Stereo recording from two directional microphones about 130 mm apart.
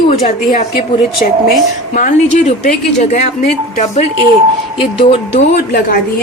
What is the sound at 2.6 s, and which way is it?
Speech, 70° left (ahead or behind).